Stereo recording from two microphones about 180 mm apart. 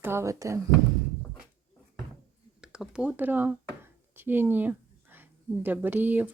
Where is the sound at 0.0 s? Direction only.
15° right (ahead or behind).